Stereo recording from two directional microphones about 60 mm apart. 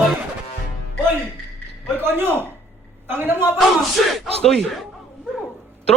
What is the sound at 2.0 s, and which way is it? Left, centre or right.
A man's voice, right.